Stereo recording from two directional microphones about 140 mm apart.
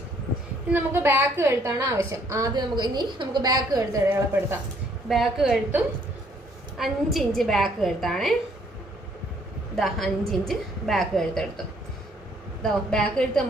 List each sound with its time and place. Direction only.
0.7 s a woman's voice: 15° right (ahead or behind)
4.1 s speech: 15° right (ahead or behind)
5.0 s a woman's voice: centre (ahead or behind)
9.7 s a woman's voice: centre (ahead or behind)
12.6 s a woman's voice: 5° left (ahead or behind)